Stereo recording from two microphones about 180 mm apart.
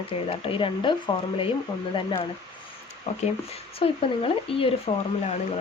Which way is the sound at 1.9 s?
30° left (ahead or behind).